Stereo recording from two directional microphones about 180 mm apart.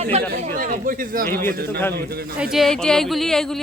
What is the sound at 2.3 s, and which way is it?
Speech, 5° right (ahead or behind).